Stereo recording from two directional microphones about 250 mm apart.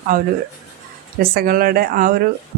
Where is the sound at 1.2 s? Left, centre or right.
Right.